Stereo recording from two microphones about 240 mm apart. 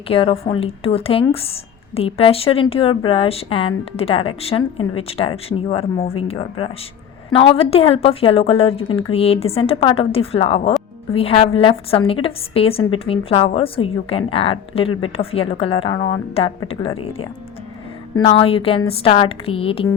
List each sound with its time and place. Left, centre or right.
0.1 s a woman's voice: left